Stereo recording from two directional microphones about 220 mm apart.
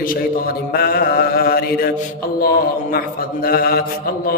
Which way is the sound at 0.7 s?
45° left (ahead or behind).